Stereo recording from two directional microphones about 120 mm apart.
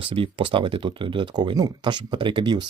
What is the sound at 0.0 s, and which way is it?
Speech, 50° right (ahead or behind).